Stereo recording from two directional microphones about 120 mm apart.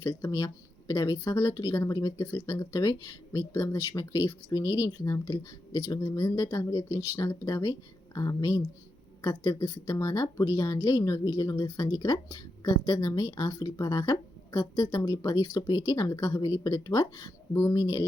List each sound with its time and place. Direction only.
0.0 s speech: 20° left (ahead or behind)